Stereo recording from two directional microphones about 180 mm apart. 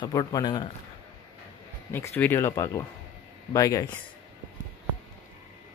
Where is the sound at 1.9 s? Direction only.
10° left (ahead or behind).